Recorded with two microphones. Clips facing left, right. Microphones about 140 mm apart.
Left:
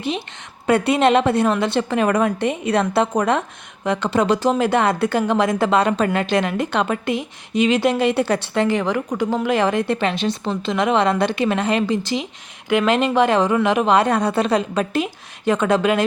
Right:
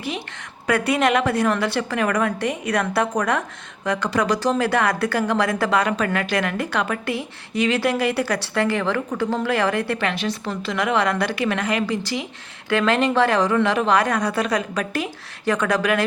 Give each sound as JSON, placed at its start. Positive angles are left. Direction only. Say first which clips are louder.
{"t": 0.7, "sound": "a woman's voice", "louder": "left 4 dB", "side_deg": 25}